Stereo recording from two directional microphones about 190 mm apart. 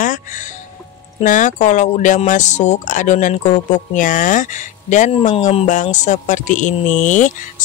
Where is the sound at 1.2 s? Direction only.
40° left (ahead or behind).